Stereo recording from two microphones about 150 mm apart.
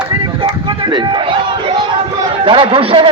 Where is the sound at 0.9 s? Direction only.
30° right (ahead or behind).